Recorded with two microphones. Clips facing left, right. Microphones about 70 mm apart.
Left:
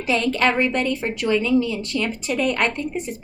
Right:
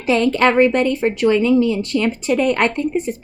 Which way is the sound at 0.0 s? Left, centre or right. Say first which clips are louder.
Right 5 dB; right.